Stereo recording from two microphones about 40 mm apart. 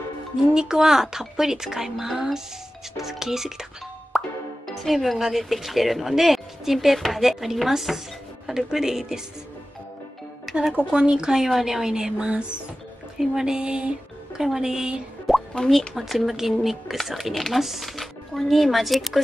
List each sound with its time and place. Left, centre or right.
0.6 s speech: centre
4.6 s speech: centre
10.5 s music: centre
10.9 s speech: right
12.2 s speech: right
13.2 s speech: centre
13.6 s music: right
14.4 s speech: centre
15.3 s plop: centre
15.9 s speech: centre